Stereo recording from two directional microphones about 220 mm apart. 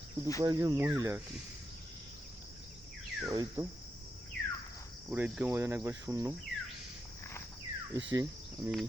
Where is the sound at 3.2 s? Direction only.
10° right (ahead or behind).